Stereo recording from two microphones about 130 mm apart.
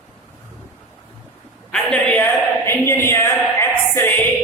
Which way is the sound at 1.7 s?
5° left (ahead or behind).